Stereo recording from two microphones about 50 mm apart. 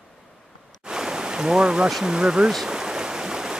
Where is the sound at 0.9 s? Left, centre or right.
Centre.